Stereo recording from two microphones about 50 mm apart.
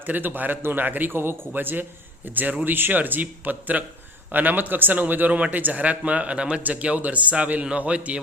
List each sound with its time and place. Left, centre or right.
0.0 s a man's voice: right